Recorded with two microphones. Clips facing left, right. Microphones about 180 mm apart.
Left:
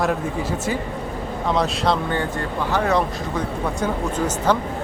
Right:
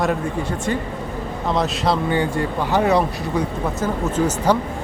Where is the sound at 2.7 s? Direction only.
15° right (ahead or behind).